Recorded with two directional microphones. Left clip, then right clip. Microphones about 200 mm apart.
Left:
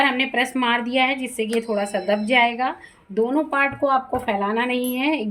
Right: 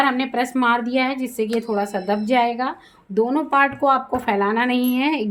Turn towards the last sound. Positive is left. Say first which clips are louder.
# right 2 dB
turn(degrees=-50)  # may be behind; listen again after turning